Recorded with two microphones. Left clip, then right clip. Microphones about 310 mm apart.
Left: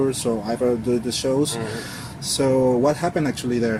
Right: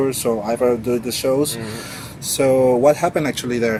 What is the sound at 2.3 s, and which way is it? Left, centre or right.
Speech, right.